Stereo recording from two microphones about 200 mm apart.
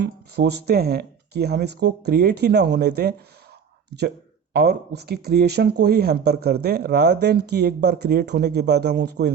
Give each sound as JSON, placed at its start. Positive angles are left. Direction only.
{"t": 0.0, "sound": "speech", "side_deg": -55}
{"t": 4.5, "sound": "speech", "side_deg": -55}